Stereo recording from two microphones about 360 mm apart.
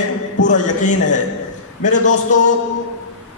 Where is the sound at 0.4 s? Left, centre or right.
Left.